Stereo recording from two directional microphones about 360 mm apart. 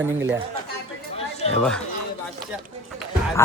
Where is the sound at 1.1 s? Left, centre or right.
Centre.